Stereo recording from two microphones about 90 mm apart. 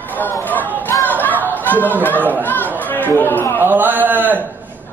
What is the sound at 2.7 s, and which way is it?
Chatter, 20° left (ahead or behind).